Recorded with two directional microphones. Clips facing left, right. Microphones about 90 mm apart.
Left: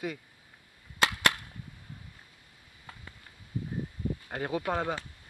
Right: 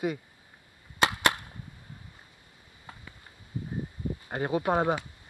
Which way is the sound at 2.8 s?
10° right (ahead or behind).